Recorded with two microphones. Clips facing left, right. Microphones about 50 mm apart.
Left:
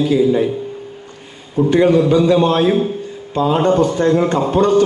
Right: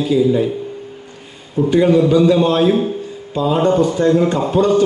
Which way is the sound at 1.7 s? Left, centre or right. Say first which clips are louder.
Even; left.